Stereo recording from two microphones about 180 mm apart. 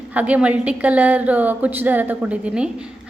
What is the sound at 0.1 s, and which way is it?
A woman's voice, 10° right (ahead or behind).